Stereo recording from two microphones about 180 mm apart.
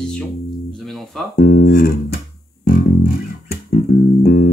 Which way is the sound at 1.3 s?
55° left (ahead or behind).